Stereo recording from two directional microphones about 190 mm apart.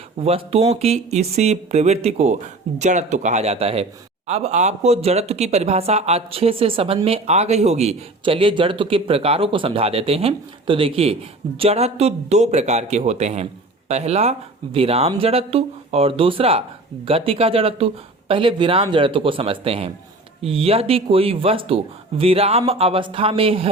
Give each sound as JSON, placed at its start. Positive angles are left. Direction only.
{"t": 0.2, "sound": "speech", "side_deg": -30}